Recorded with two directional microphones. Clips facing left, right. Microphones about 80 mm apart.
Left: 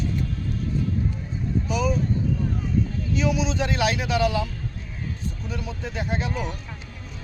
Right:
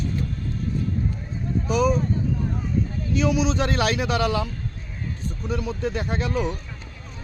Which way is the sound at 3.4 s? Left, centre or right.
Right.